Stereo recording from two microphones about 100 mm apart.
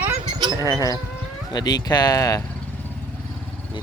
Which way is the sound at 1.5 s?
45° left (ahead or behind).